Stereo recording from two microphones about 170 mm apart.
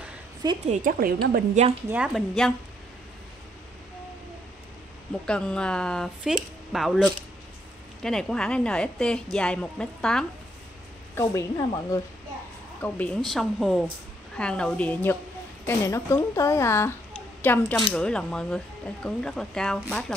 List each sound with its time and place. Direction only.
0.7 s a woman's voice: 55° right (ahead or behind)
1.9 s a woman's voice: 5° right (ahead or behind)
5.2 s a woman's voice: 5° left (ahead or behind)
11.1 s a woman's voice: 15° left (ahead or behind)